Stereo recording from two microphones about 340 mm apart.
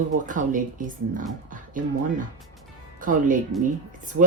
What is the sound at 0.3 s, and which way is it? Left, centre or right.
Speech, right.